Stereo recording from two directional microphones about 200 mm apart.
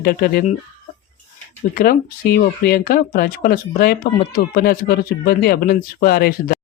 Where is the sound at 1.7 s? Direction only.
45° left (ahead or behind).